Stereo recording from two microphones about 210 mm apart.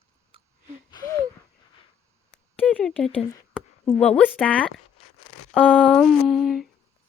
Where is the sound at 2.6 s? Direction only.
5° left (ahead or behind).